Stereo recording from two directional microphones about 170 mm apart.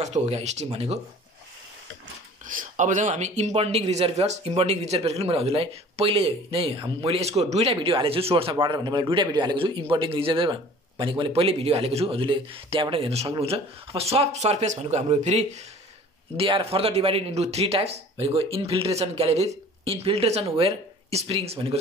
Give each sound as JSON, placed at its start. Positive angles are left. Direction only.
{"t": 0.0, "sound": "speech", "side_deg": -40}
{"t": 2.4, "sound": "speech", "side_deg": -50}